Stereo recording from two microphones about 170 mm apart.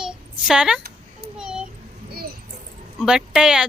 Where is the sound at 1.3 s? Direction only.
5° right (ahead or behind).